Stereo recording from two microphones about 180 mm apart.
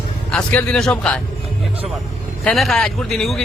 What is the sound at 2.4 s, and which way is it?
Speech, centre (ahead or behind).